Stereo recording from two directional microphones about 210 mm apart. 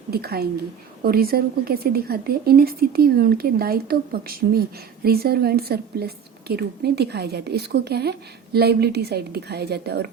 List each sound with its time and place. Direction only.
0.1 s speech: 50° right (ahead or behind)